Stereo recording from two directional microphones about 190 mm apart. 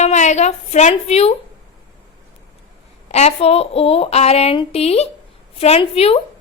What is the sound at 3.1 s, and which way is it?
A woman's voice, 35° left (ahead or behind).